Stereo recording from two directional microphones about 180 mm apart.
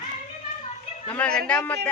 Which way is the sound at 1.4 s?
5° left (ahead or behind).